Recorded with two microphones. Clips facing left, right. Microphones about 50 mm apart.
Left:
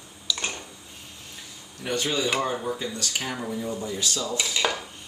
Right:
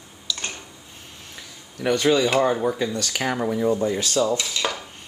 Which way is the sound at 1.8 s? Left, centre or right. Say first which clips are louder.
Right 7 dB; right.